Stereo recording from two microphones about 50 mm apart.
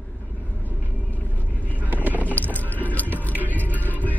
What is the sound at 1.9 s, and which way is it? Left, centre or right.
Vehicle, right.